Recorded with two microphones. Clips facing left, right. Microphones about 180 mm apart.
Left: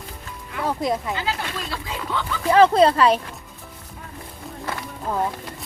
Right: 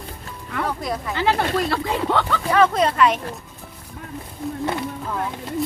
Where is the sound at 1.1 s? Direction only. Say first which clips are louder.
Right 7 dB; 60° right (ahead or behind).